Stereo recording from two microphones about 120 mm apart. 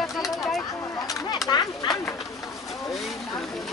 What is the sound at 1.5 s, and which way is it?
Speech, 35° left (ahead or behind).